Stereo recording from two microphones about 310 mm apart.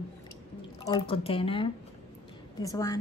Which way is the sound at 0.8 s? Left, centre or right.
Centre.